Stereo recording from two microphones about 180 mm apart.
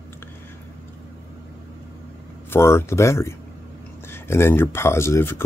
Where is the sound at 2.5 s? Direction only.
15° left (ahead or behind).